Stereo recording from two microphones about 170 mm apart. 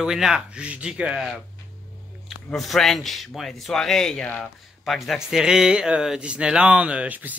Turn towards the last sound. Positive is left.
turn(degrees=-10)  # may be behind; listen again after turning